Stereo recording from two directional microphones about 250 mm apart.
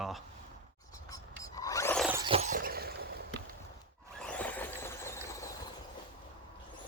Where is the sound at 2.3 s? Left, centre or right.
Right.